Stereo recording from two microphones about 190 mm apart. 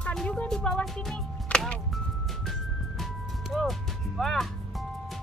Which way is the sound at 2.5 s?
Centre (ahead or behind).